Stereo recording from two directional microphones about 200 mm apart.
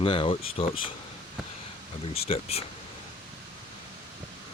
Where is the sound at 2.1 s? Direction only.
30° left (ahead or behind).